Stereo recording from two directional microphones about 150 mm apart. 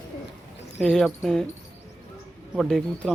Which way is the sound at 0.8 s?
5° left (ahead or behind).